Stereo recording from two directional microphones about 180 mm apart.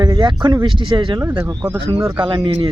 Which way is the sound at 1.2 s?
15° right (ahead or behind).